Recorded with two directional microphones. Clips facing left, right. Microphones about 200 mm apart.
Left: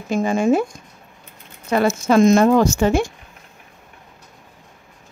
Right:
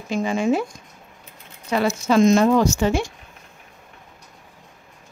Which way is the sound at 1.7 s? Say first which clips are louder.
Left 3 dB; 50° left (ahead or behind).